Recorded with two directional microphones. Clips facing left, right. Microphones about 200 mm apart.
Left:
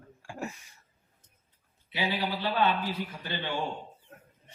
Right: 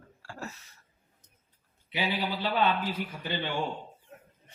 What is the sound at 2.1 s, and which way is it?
A man's voice, 15° right (ahead or behind).